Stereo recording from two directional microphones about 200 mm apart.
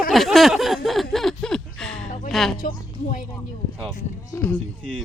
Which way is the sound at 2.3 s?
Centre (ahead or behind).